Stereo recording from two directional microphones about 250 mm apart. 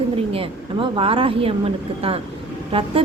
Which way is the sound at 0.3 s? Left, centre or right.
Right.